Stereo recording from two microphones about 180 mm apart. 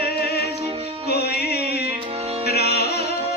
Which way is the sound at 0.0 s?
65° left (ahead or behind).